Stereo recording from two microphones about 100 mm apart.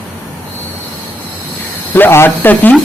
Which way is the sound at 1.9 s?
20° left (ahead or behind).